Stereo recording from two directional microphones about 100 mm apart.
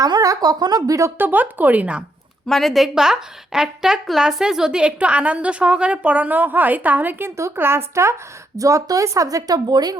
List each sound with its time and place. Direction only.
0.0 s speech: 35° right (ahead or behind)
1.2 s a woman's voice: 20° right (ahead or behind)
2.5 s a woman's voice: centre (ahead or behind); by 10.0 s 40° right (ahead or behind)